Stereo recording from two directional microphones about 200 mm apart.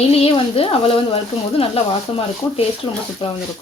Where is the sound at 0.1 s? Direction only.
30° left (ahead or behind).